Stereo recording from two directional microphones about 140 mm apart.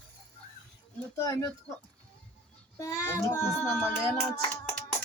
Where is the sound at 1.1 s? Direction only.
25° left (ahead or behind).